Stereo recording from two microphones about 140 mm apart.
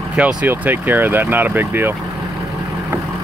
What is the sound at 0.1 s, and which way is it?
Speech, 10° right (ahead or behind).